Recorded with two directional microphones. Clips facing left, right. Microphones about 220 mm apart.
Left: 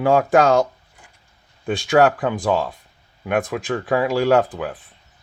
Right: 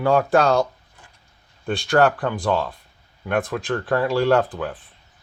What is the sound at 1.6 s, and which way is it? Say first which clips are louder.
Speech: left 2 dB; 15° left (ahead or behind).